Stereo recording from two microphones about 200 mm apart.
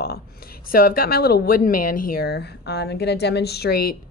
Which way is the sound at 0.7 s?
45° left (ahead or behind).